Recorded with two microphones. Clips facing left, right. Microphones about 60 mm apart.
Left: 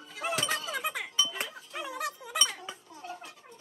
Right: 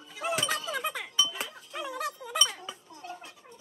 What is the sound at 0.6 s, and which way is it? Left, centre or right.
Music, centre.